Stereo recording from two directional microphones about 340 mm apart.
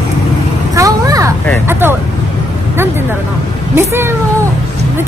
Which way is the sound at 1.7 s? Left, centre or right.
Centre.